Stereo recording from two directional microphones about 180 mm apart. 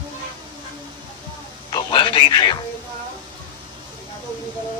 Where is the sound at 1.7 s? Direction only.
25° left (ahead or behind).